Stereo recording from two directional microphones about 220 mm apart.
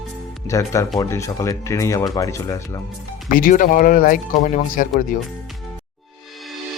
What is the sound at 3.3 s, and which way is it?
Speech, 40° left (ahead or behind).